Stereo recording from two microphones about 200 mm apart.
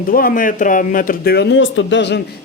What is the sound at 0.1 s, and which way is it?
Speech, 45° left (ahead or behind).